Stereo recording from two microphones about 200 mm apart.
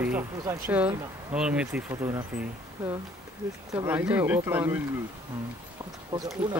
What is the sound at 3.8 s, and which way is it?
Speech, 10° right (ahead or behind).